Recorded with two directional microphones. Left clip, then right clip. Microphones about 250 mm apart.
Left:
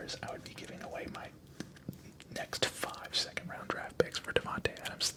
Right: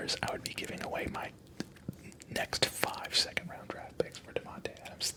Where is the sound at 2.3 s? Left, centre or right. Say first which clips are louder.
Right 3 dB; centre.